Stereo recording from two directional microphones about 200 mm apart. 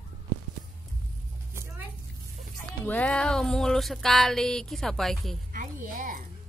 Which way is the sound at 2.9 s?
5° left (ahead or behind).